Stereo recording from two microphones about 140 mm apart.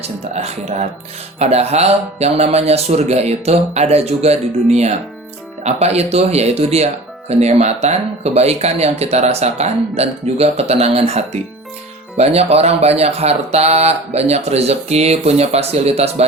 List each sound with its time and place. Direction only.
0.0 s speech: 50° right (ahead or behind)